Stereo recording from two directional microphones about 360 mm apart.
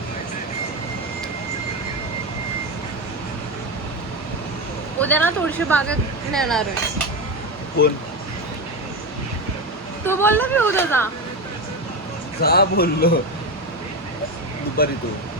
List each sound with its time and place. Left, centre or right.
4.9 s speech: centre
10.1 s a woman's voice: centre
12.4 s speech: left
14.8 s speech: left